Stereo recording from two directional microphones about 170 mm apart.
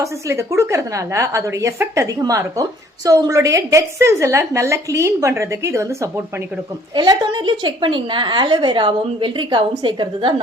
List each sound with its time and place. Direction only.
0.0 s a woman's voice: 15° right (ahead or behind)
6.9 s a woman's voice: 25° right (ahead or behind)